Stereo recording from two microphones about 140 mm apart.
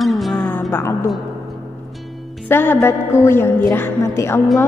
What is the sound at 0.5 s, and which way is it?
Music, 15° left (ahead or behind).